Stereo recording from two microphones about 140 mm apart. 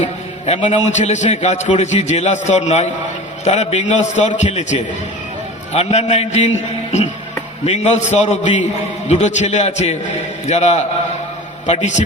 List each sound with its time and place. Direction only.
0.0 s a man's voice: 55° left (ahead or behind)